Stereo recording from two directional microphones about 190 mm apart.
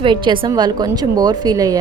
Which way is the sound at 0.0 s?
25° right (ahead or behind).